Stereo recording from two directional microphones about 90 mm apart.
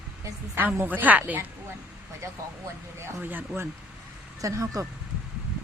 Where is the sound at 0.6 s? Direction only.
20° right (ahead or behind).